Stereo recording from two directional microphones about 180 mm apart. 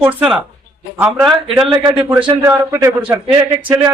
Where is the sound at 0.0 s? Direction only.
10° right (ahead or behind).